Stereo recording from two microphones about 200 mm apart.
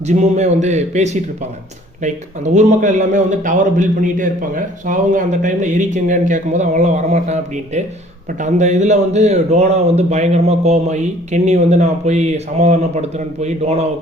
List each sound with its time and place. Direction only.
0.1 s a man's voice: 35° right (ahead or behind)